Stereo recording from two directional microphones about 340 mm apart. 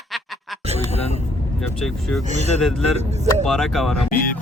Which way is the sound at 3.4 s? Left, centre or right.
Centre.